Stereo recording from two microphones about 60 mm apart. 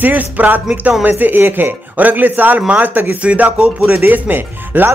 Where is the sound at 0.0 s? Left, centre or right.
Right.